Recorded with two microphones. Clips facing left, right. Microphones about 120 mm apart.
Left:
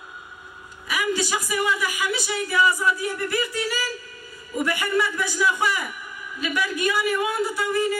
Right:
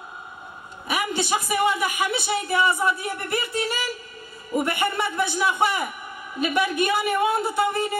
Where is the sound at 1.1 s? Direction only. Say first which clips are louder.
Left 2 dB; 25° right (ahead or behind).